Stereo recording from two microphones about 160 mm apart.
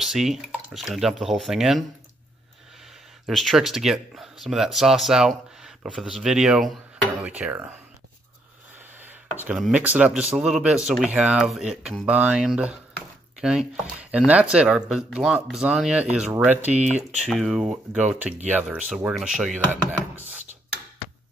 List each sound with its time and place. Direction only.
0.0 s speech: centre (ahead or behind)
3.3 s speech: centre (ahead or behind)
8.7 s a sound: 10° right (ahead or behind)
9.6 s speech: 5° right (ahead or behind)
17.2 s speech: centre (ahead or behind)